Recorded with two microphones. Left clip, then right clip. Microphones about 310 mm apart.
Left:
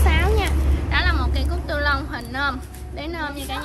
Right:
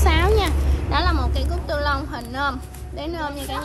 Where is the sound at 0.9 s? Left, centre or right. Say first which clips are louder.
Even; centre.